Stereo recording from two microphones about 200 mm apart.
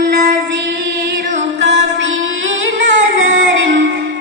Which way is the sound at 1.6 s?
60° right (ahead or behind).